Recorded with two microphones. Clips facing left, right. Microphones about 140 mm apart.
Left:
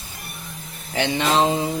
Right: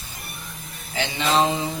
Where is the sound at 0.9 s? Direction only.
50° left (ahead or behind).